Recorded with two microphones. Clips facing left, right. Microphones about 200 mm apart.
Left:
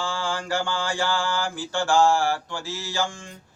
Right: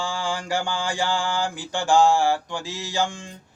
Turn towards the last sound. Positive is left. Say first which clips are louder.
# right 2 dB
turn(degrees=-20)  # may be behind; listen again after turning